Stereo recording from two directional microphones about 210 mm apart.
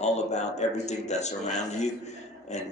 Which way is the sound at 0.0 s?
30° left (ahead or behind).